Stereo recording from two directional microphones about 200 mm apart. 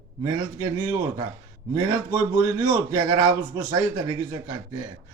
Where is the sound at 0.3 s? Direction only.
15° right (ahead or behind).